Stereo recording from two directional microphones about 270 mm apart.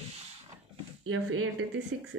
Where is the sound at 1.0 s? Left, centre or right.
Right.